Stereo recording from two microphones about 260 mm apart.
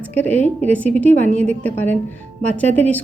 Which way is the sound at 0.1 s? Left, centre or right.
Centre.